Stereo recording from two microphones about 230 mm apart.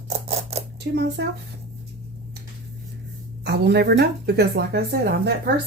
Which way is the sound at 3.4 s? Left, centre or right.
Right.